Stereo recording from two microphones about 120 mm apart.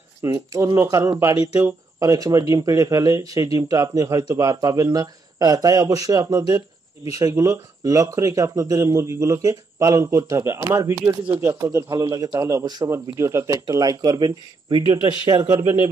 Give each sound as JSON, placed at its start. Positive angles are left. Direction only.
{"t": 0.2, "sound": "speech", "side_deg": -25}
{"t": 15.4, "sound": "speech", "side_deg": -25}